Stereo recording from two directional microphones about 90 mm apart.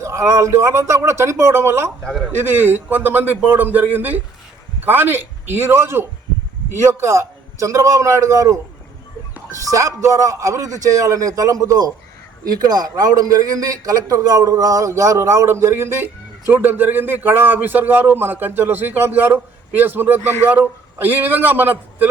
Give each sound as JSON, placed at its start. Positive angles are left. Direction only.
{"t": 0.0, "sound": "a man's voice", "side_deg": -35}
{"t": 9.6, "sound": "a man's voice", "side_deg": -35}